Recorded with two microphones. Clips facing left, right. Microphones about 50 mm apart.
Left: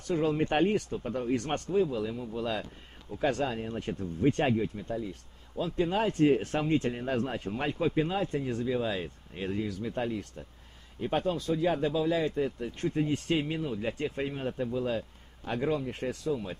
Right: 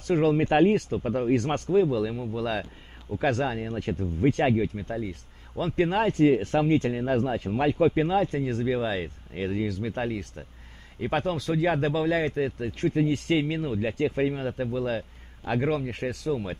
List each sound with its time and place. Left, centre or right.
0.1 s speech: right
1.9 s speech: right
3.3 s speech: right
4.6 s speech: right
8.8 s speech: right
9.6 s speech: right
13.7 s speech: right
15.9 s speech: right